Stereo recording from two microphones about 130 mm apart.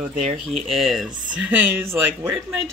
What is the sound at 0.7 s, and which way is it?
Speech, centre (ahead or behind).